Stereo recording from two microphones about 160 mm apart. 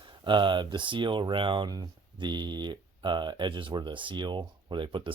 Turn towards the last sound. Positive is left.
turn(degrees=-30)  # may be behind; listen again after turning